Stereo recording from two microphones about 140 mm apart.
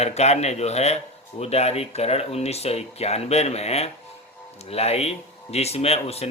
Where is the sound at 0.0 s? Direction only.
50° left (ahead or behind).